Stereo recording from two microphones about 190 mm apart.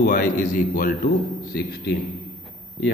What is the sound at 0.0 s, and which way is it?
A man's voice, 45° left (ahead or behind).